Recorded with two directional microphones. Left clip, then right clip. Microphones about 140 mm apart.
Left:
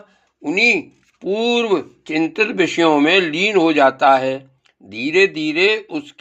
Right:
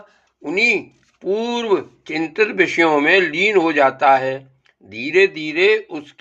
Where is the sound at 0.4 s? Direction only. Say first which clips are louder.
Left 2 dB; 30° left (ahead or behind).